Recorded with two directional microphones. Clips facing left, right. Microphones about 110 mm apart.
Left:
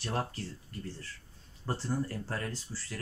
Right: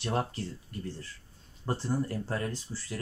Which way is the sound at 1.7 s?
15° right (ahead or behind).